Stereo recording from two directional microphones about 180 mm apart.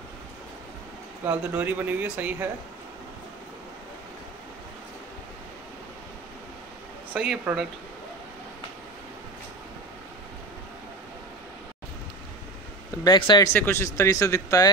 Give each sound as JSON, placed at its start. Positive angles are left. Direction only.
{"t": 1.2, "sound": "speech", "side_deg": -10}
{"t": 7.2, "sound": "speech", "side_deg": -5}
{"t": 13.0, "sound": "speech", "side_deg": 25}
{"t": 13.5, "sound": "speech", "side_deg": 10}